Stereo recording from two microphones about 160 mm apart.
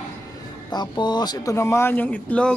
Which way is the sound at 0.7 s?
25° left (ahead or behind).